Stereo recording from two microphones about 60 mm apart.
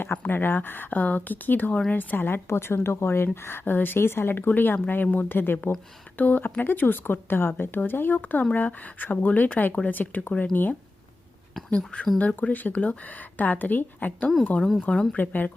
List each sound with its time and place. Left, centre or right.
0.0 s a woman's voice: left
11.9 s a woman's voice: centre